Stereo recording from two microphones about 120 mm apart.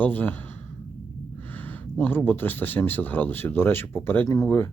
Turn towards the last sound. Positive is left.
turn(degrees=25)  # may be behind; listen again after turning